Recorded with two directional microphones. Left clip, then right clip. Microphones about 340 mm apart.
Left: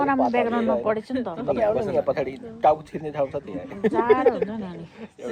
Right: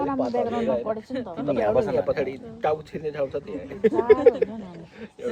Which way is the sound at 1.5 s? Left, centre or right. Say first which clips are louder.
Even; centre.